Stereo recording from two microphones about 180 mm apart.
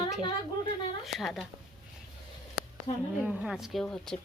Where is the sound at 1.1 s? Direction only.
Centre (ahead or behind).